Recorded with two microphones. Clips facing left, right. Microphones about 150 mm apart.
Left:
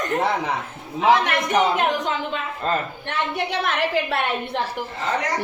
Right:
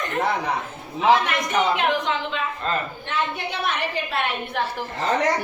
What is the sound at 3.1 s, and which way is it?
A woman's voice, 85° left.